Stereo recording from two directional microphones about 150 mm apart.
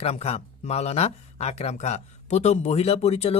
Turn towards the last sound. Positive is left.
turn(degrees=45)  # may be behind; listen again after turning